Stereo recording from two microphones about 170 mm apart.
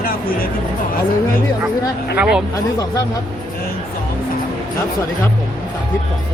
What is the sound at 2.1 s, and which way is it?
Speech, 5° right (ahead or behind).